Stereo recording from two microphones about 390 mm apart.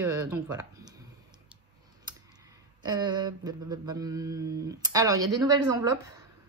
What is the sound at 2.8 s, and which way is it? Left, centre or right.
Mantra, centre.